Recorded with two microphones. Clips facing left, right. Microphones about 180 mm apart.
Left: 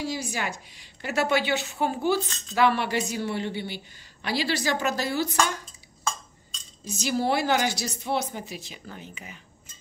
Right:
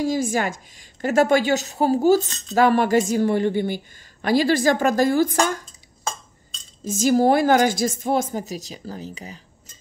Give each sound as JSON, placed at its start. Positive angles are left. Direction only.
{"t": 0.0, "sound": "speech", "side_deg": -45}
{"t": 6.8, "sound": "speech", "side_deg": -45}